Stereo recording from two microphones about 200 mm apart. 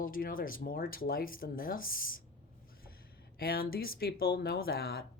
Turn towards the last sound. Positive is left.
turn(degrees=50)  # may be behind; listen again after turning